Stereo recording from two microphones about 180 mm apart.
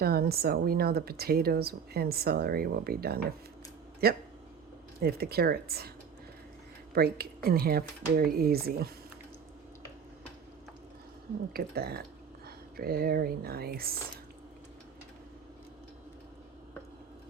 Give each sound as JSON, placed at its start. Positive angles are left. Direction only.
{"t": 0.0, "sound": "speech", "side_deg": -60}
{"t": 6.9, "sound": "speech", "side_deg": -55}
{"t": 11.5, "sound": "speech", "side_deg": -60}